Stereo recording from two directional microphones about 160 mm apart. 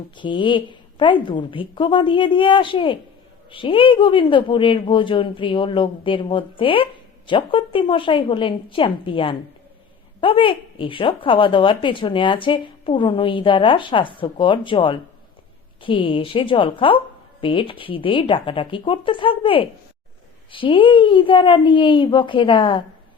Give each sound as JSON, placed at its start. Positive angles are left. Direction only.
{"t": 0.2, "sound": "a woman's voice", "side_deg": 30}